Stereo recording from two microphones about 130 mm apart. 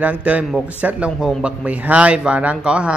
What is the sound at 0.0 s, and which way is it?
Speech, 10° right (ahead or behind).